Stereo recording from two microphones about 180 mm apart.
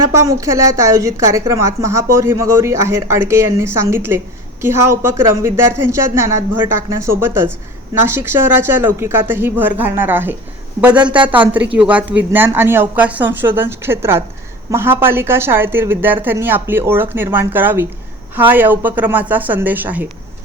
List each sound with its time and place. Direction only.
0.0 s a woman's voice: 15° right (ahead or behind)